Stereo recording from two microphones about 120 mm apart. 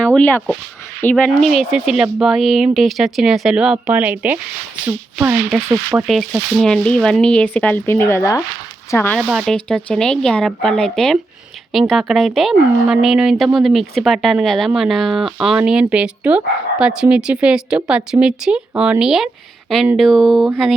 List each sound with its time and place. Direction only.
0.0 s speech: 10° left (ahead or behind)
1.1 s speech: 5° left (ahead or behind); by 4.4 s 15° right (ahead or behind)
5.5 s speech: 25° right (ahead or behind)
6.6 s speech: 5° left (ahead or behind)
9.1 s speech: centre (ahead or behind)